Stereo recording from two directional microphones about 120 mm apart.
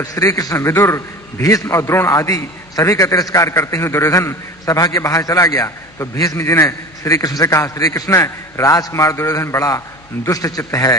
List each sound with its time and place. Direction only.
0.0 s a man's voice: 30° left (ahead or behind)